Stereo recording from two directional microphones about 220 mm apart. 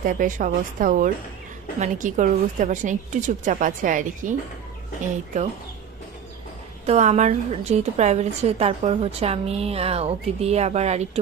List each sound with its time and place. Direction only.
0.0 s a woman's voice: 35° right (ahead or behind)
6.9 s a woman's voice: 30° right (ahead or behind)